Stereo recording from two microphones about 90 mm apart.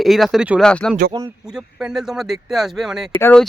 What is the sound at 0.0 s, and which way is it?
Speech, centre (ahead or behind).